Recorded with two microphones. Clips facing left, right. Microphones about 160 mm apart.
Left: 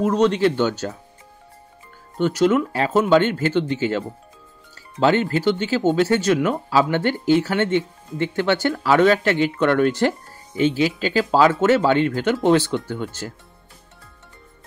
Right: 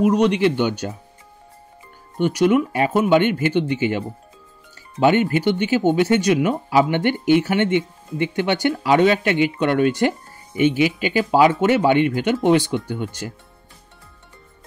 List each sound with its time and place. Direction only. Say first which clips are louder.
0.0 s speech: right 1 dB; 10° right (ahead or behind)
2.1 s speech: right 1 dB; 15° right (ahead or behind)
5.0 s speech: right 1 dB; 15° right (ahead or behind)